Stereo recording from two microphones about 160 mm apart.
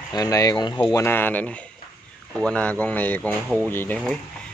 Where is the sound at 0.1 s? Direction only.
20° left (ahead or behind).